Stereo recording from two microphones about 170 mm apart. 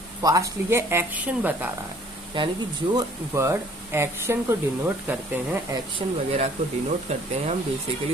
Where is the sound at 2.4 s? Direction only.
30° right (ahead or behind).